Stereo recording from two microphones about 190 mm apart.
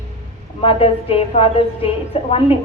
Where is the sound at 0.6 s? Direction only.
30° left (ahead or behind).